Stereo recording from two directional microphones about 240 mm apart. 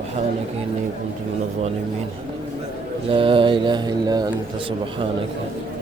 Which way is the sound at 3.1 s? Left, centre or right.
Right.